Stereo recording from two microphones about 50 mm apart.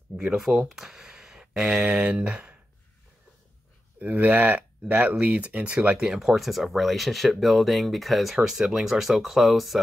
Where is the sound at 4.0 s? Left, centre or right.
Right.